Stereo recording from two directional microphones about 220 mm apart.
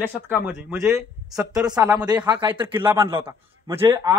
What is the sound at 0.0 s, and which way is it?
A man's voice, 10° right (ahead or behind).